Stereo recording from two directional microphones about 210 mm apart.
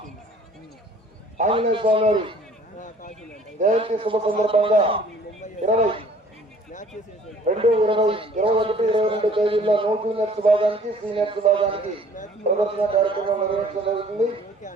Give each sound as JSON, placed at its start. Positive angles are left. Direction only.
{"t": 1.4, "sound": "a man's voice", "side_deg": -30}
{"t": 3.6, "sound": "a man's voice", "side_deg": -30}
{"t": 7.4, "sound": "a man's voice", "side_deg": -30}